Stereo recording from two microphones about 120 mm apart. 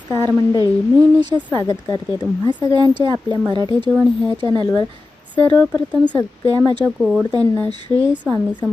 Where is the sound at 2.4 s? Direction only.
40° right (ahead or behind).